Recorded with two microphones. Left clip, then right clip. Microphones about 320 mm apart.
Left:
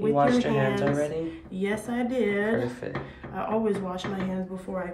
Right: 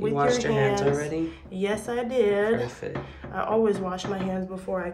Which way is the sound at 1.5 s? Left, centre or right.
Right.